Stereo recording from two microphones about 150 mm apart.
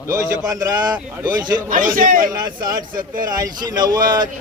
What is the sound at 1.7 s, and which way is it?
Speech, 65° right (ahead or behind).